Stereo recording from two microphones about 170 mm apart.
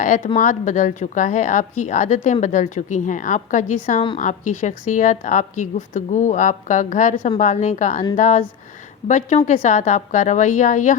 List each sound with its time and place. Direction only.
0.0 s a woman's voice: 50° left (ahead or behind)